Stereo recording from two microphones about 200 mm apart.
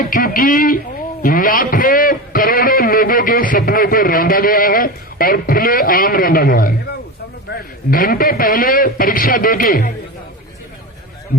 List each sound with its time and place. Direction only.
0.0 s a man's voice: 45° left (ahead or behind)
7.9 s a man's voice: 45° left (ahead or behind)